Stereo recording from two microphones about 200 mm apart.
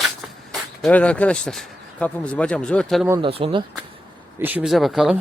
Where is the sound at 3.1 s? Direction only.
20° right (ahead or behind).